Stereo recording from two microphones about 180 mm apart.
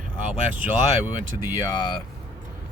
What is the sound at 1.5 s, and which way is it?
Speech, 25° left (ahead or behind).